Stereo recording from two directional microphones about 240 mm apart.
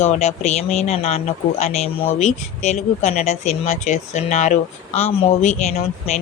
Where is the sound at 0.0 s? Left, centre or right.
Left.